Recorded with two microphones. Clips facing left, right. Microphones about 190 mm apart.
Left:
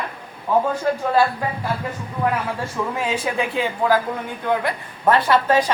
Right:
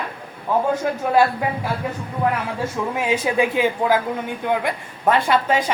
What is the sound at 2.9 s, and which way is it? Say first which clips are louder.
Speech: right 4 dB; 10° right (ahead or behind).